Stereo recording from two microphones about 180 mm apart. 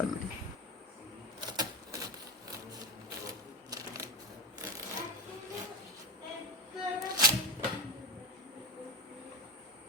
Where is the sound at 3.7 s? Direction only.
20° right (ahead or behind).